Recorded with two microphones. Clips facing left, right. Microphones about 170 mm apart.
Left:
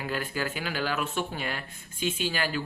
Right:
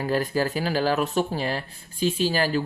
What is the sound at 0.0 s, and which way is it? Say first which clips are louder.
Speech: right 8 dB; 40° right (ahead or behind).